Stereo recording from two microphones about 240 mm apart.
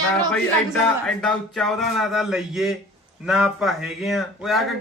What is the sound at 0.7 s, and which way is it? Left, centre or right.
A man's voice, centre.